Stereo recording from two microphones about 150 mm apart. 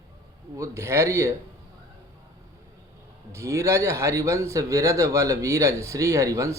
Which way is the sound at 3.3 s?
20° right (ahead or behind).